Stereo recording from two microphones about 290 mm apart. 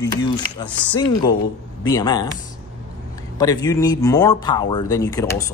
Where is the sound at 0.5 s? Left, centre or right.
Centre.